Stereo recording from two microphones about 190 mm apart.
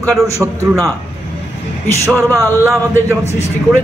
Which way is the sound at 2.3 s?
15° right (ahead or behind).